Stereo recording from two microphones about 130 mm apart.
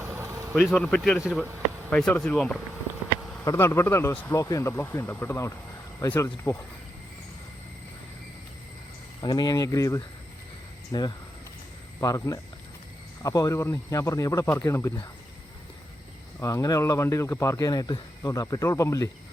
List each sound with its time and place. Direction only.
0.0 s vehicle: 20° right (ahead or behind)
0.8 s speech: 5° left (ahead or behind)
3.4 s speech: 20° left (ahead or behind)
9.2 s speech: 35° left (ahead or behind)
16.4 s speech: 25° left (ahead or behind)